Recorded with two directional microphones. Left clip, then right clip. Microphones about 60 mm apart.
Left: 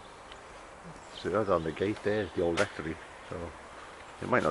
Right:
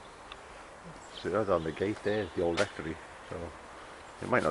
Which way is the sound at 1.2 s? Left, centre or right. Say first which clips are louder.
Left 1 dB; left.